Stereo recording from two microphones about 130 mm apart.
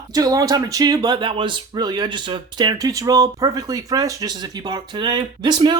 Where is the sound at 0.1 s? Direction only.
30° right (ahead or behind).